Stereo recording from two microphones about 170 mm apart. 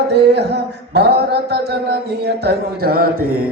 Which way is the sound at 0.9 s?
70° right (ahead or behind).